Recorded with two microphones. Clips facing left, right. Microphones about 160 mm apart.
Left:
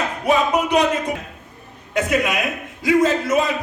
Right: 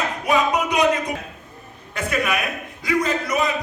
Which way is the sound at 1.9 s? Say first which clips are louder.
Left 4 dB; 20° left (ahead or behind).